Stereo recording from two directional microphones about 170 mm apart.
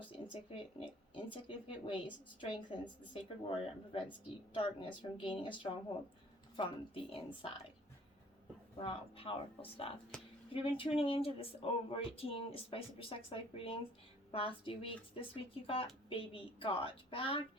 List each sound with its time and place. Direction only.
0.1 s speech: 30° left (ahead or behind)
6.6 s speech: 30° left (ahead or behind)
8.8 s speech: 35° left (ahead or behind)
10.1 s a sound: 5° left (ahead or behind)
10.5 s speech: 30° left (ahead or behind)